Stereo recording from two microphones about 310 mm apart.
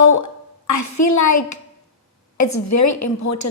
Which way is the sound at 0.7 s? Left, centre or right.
Left.